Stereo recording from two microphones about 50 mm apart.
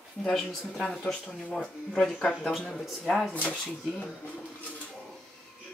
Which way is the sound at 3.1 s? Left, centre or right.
Centre.